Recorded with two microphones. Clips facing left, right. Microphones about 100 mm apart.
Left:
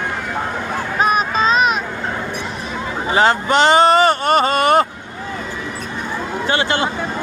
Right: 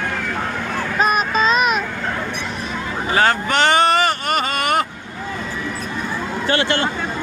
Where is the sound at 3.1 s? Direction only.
20° left (ahead or behind).